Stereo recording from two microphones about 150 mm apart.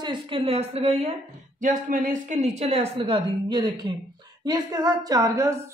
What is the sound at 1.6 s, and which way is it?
A woman's voice, 65° right (ahead or behind).